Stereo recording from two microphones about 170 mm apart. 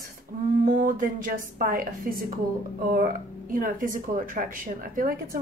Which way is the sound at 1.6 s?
55° right (ahead or behind).